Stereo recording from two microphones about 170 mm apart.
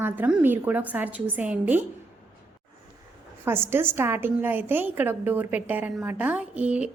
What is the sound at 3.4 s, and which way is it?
A woman's voice, 15° right (ahead or behind).